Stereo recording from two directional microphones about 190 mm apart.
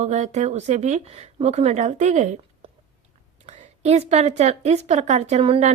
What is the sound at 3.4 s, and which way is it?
A woman's voice, 35° right (ahead or behind).